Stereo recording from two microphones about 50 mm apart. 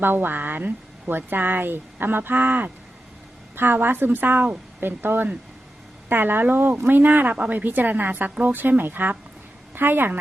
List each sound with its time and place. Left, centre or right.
0.0 s speech: right